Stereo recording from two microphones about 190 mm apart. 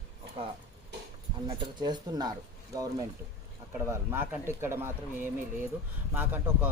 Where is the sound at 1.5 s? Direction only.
20° right (ahead or behind).